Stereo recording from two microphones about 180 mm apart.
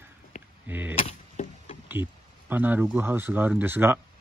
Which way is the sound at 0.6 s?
10° right (ahead or behind).